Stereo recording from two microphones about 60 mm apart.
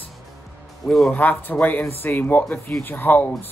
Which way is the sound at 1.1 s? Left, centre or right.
Left.